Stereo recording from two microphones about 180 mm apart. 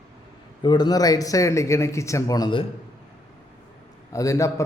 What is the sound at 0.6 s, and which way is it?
A man's voice, 25° left (ahead or behind).